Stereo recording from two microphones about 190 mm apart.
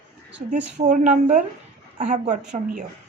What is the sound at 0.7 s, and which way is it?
Speech, 45° right (ahead or behind).